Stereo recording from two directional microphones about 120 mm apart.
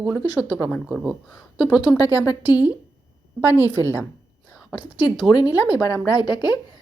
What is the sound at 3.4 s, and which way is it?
Speech, 15° right (ahead or behind).